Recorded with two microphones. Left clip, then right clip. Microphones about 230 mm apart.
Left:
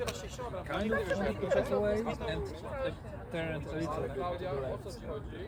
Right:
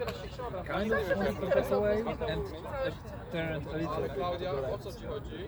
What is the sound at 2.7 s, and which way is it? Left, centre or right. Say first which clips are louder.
Speech: right 2 dB; right.